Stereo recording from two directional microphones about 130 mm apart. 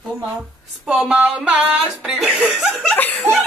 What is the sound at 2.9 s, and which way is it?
Chuckle, 15° left (ahead or behind).